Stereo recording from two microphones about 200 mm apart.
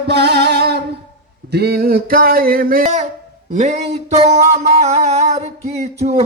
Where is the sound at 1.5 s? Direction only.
50° right (ahead or behind); by 3.1 s 35° right (ahead or behind).